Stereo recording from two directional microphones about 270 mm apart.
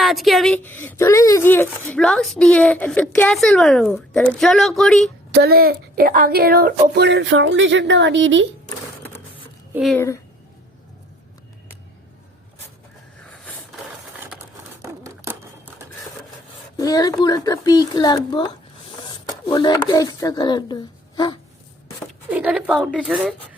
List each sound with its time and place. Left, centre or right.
0.0 s speech: centre
5.3 s speech: right
9.7 s speech: centre
13.3 s a sound: centre
14.3 s a sound: centre
16.7 s speech: centre
22.3 s speech: centre